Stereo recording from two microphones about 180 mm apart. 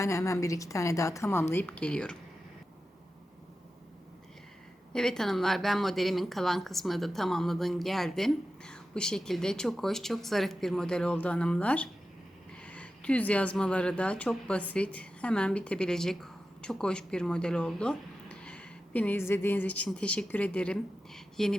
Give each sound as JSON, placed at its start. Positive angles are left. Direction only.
{"t": 0.0, "sound": "a woman's voice", "side_deg": 15}
{"t": 4.9, "sound": "speech", "side_deg": 5}